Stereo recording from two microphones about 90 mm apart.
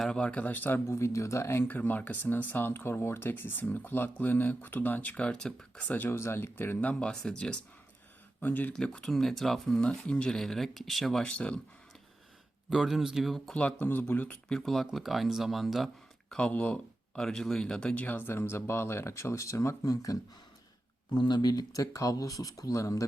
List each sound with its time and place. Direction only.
0.0 s speech: 10° left (ahead or behind)
7.0 s speech: 10° left (ahead or behind)
8.7 s speech: 10° left (ahead or behind)
11.3 s speech: 15° left (ahead or behind)
12.7 s speech: centre (ahead or behind)
13.5 s speech: 15° left (ahead or behind)
14.5 s speech: 5° left (ahead or behind)
16.3 s speech: 15° left (ahead or behind); by 20.1 s 40° left (ahead or behind)
21.2 s speech: 55° left (ahead or behind); by 23.0 s 35° left (ahead or behind)